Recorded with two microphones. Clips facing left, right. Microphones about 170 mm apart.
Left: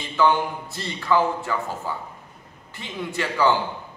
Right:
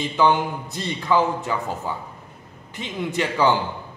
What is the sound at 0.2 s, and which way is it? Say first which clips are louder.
A man's voice: right 1 dB; 20° right (ahead or behind).